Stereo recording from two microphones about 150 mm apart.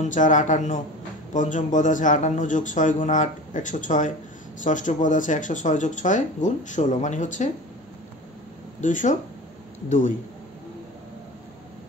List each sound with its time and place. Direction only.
0.0 s speech: 55° left (ahead or behind)
8.8 s speech: 55° left (ahead or behind)